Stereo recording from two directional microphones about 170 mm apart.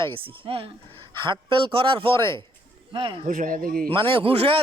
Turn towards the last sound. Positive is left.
turn(degrees=-35)  # may be behind; listen again after turning